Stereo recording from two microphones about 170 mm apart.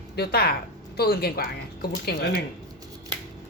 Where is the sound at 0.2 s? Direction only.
70° left (ahead or behind).